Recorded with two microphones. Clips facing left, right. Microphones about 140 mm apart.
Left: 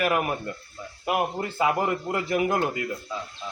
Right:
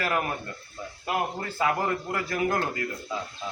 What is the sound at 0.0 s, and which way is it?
A man's voice, 15° left (ahead or behind).